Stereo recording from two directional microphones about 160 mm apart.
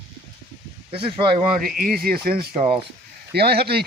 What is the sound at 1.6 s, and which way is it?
Speech, 65° right (ahead or behind).